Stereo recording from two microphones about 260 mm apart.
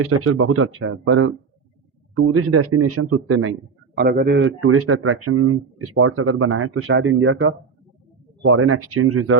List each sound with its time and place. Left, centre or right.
0.0 s a man's voice: right
3.9 s a man's voice: right